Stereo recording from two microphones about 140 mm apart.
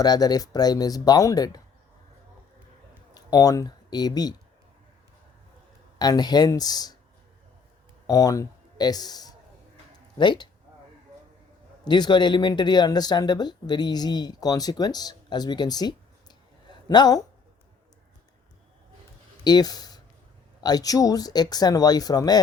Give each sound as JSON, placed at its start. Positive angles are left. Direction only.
{"t": 0.0, "sound": "speech", "side_deg": 25}
{"t": 3.2, "sound": "speech", "side_deg": 25}
{"t": 6.0, "sound": "speech", "side_deg": 30}
{"t": 8.0, "sound": "speech", "side_deg": 25}
{"t": 11.9, "sound": "speech", "side_deg": 30}
{"t": 16.6, "sound": "a sound", "side_deg": 30}
{"t": 19.5, "sound": "speech", "side_deg": 30}